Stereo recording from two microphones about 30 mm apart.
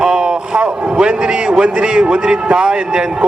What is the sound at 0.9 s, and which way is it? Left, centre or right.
A man's voice, right.